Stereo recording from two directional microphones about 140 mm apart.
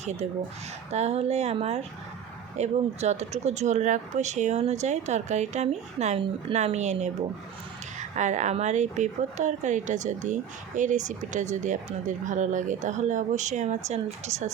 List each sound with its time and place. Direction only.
0.0 s speech: 55° right (ahead or behind)